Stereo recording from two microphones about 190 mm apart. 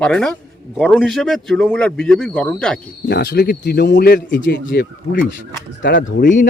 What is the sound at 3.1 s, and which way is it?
Speech, 60° left (ahead or behind).